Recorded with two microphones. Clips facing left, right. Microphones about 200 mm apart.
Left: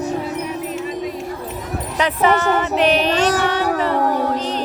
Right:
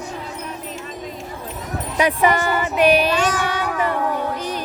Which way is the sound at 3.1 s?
40° left (ahead or behind).